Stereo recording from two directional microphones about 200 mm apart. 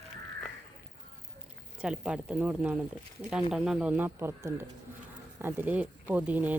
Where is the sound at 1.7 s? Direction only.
5° right (ahead or behind).